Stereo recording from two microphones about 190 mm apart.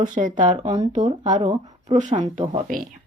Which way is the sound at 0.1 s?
45° right (ahead or behind).